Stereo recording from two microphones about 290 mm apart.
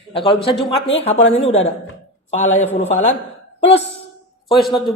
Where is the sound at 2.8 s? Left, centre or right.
Left.